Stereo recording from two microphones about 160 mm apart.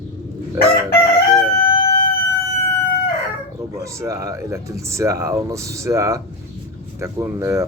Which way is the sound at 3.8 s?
20° right (ahead or behind).